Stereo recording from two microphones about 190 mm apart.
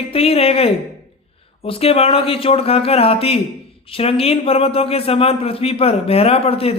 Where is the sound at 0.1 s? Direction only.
30° left (ahead or behind).